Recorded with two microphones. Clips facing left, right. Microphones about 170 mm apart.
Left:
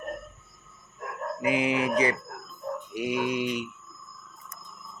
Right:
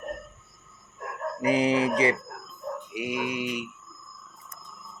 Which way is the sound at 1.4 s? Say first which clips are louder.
Right 3 dB; 35° right (ahead or behind).